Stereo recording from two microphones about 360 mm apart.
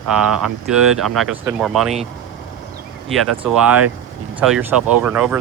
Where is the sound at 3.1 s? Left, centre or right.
Centre.